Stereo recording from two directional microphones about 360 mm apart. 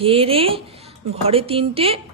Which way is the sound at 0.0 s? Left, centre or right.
Centre.